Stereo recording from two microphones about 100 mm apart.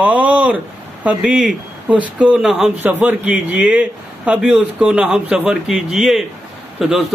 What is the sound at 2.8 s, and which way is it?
A man's voice, 20° right (ahead or behind).